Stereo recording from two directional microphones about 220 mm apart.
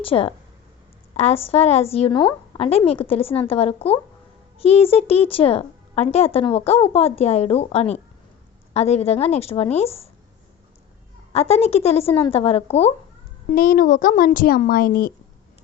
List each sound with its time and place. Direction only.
0.0 s speech: 25° left (ahead or behind)
11.3 s speech: 30° left (ahead or behind)
13.5 s speech: 40° left (ahead or behind)